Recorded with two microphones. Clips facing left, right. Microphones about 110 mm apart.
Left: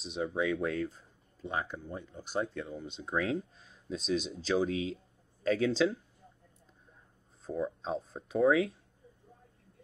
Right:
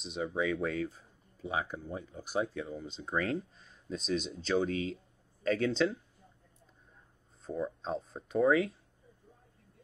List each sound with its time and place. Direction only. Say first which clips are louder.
0.0 s speech: left 1 dB; centre (ahead or behind)
7.4 s speech: left 1 dB; centre (ahead or behind)